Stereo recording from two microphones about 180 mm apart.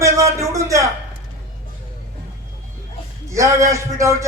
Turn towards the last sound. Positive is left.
turn(degrees=-15)  # may be behind; listen again after turning